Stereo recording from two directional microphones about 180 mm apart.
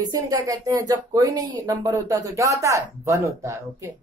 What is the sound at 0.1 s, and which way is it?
Speech, 20° right (ahead or behind).